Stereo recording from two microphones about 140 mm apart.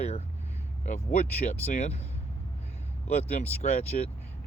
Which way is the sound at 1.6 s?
55° left (ahead or behind).